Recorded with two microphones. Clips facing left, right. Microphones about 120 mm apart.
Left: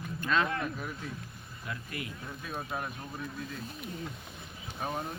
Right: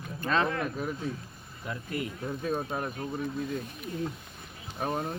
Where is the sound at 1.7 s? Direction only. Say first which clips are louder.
Right 6 dB; 35° right (ahead or behind).